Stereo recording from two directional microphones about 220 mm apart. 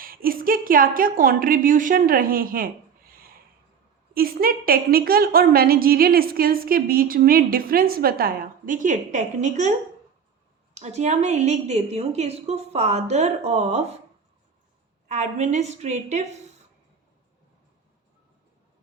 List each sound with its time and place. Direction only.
0.0 s a woman's voice: 40° right (ahead or behind)
10.8 s a woman's voice: 30° right (ahead or behind)
15.0 s a woman's voice: 30° right (ahead or behind)